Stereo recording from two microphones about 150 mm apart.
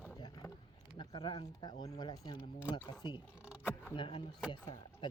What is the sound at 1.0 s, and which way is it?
Speech, 30° left (ahead or behind).